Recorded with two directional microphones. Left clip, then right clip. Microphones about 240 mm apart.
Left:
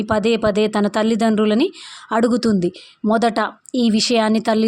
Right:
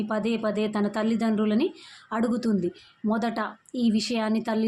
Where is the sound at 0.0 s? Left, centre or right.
Left.